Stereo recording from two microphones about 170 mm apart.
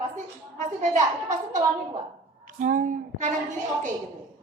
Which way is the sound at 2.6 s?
50° right (ahead or behind).